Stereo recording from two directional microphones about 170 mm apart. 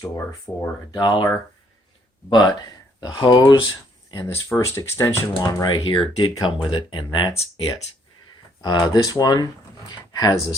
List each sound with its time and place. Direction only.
0.0 s speech: 20° left (ahead or behind)
2.3 s speech: 25° left (ahead or behind)
8.6 s speech: 25° left (ahead or behind)